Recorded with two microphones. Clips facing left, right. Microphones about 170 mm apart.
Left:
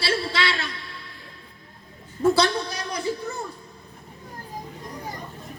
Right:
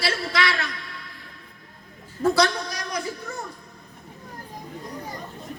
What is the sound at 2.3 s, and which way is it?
A man's voice, 30° left (ahead or behind).